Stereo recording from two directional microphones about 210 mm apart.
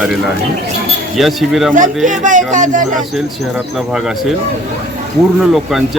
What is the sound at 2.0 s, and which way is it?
Speech, 35° right (ahead or behind).